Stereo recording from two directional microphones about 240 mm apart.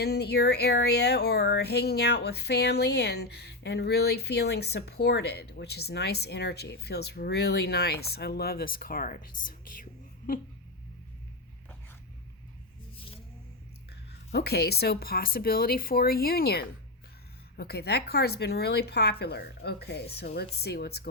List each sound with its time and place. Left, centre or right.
0.0 s speech: left
14.3 s speech: left